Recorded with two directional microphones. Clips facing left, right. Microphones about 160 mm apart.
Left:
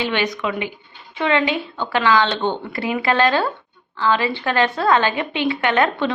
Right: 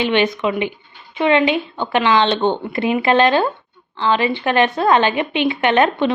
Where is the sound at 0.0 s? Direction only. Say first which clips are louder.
Right 5 dB; 20° right (ahead or behind).